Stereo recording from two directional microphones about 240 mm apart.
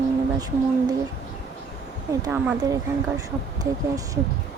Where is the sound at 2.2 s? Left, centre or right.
Centre.